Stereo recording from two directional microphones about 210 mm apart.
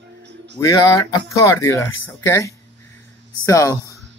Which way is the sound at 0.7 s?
15° left (ahead or behind).